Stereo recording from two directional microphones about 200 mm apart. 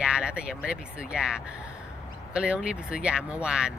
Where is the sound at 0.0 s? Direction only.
5° right (ahead or behind).